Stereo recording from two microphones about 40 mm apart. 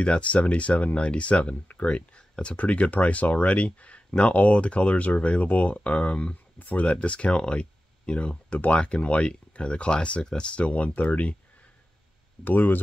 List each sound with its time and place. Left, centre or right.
0.0 s speech: left
6.6 s speech: left
6.9 s speech: left
12.4 s speech: left